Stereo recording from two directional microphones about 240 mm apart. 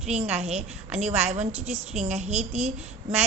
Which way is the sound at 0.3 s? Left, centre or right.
Right.